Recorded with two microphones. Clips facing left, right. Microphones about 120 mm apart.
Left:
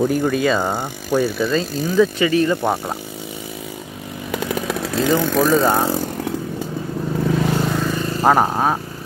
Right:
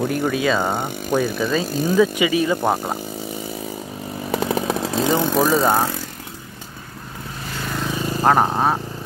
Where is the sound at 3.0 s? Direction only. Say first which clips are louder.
Right 2 dB; 40° right (ahead or behind); by 5.5 s 20° right (ahead or behind).